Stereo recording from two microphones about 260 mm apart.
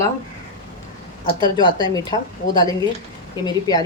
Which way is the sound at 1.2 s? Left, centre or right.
Centre.